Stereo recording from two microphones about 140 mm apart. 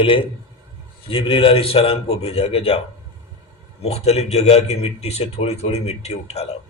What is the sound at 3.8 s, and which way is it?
A man's voice, 50° left (ahead or behind).